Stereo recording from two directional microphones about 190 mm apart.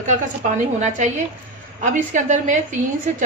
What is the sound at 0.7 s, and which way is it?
A woman's voice, 40° right (ahead or behind).